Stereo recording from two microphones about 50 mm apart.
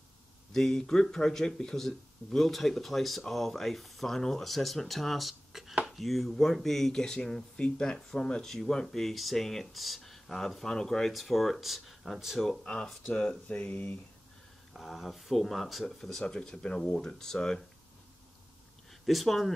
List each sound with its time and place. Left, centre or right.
0.5 s speech: centre
12.6 s speech: centre
13.3 s speech: left
14.7 s speech: centre
19.0 s speech: centre